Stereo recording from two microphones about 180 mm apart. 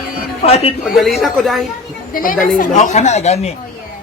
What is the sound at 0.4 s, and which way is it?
Speech, 35° left (ahead or behind).